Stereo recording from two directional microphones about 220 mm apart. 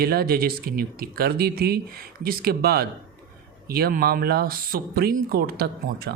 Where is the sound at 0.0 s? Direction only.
45° right (ahead or behind).